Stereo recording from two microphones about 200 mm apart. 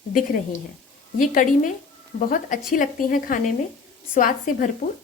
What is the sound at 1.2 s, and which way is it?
Speech, 40° left (ahead or behind).